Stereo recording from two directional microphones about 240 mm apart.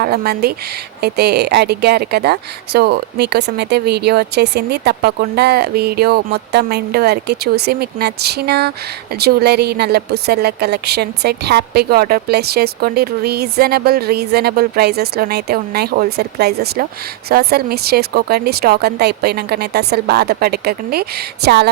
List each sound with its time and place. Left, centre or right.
0.0 s a woman's voice: right